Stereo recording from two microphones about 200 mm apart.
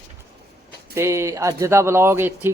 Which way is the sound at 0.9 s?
15° right (ahead or behind).